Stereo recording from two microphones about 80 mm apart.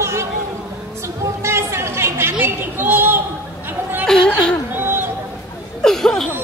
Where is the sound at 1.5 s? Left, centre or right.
Right.